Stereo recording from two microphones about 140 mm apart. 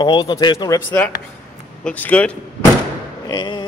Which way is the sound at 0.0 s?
35° left (ahead or behind).